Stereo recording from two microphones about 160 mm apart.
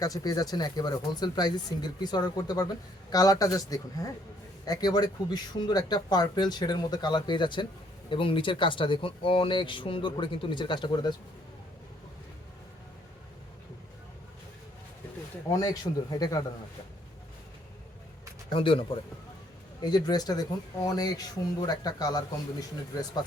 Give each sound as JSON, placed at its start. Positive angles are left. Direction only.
{"t": 0.0, "sound": "speech", "side_deg": 20}
{"t": 15.4, "sound": "speech", "side_deg": 25}
{"t": 18.5, "sound": "speech", "side_deg": 35}